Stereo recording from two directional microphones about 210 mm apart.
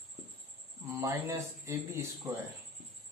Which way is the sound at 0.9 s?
15° right (ahead or behind).